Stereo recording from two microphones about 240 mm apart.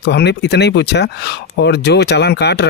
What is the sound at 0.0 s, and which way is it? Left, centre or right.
Speech, left.